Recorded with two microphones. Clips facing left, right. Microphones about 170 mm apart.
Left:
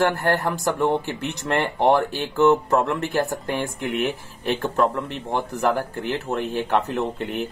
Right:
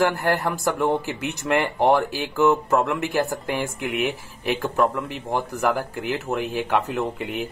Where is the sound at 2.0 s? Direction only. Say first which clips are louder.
Left 2 dB; centre (ahead or behind).